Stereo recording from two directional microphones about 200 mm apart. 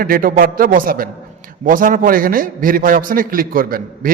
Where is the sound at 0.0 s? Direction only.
45° right (ahead or behind).